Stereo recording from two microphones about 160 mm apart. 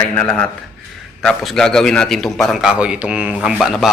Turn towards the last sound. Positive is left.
turn(degrees=0)  # may be behind; listen again after turning